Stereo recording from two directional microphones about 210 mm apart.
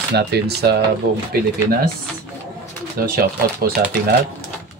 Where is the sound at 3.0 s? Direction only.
45° right (ahead or behind).